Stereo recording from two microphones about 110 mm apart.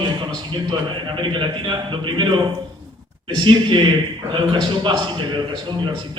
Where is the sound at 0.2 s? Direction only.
40° right (ahead or behind).